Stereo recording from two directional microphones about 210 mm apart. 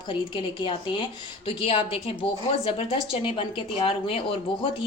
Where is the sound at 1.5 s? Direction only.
25° left (ahead or behind).